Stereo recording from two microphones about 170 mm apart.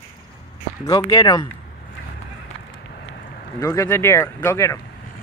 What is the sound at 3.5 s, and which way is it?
Speech, 20° left (ahead or behind).